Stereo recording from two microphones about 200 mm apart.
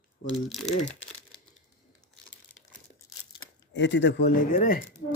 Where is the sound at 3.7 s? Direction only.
60° left (ahead or behind).